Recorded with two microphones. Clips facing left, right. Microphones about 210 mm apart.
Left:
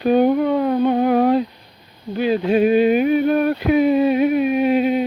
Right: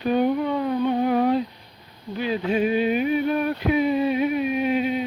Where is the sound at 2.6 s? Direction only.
65° left (ahead or behind).